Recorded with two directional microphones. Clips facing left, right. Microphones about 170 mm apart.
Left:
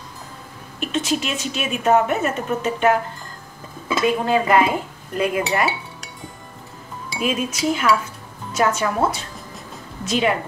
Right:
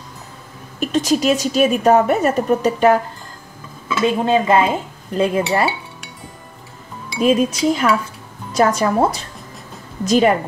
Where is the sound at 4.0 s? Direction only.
25° right (ahead or behind).